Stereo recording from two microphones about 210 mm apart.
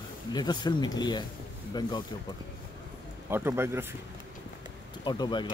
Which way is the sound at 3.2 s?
10° right (ahead or behind).